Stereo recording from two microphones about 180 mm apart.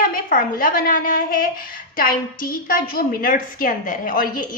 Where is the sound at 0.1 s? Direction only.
50° left (ahead or behind).